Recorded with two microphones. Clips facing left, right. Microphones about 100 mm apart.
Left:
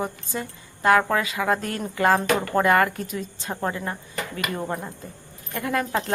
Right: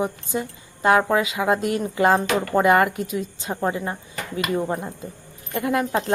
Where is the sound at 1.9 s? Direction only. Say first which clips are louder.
Right 1 dB; 20° right (ahead or behind).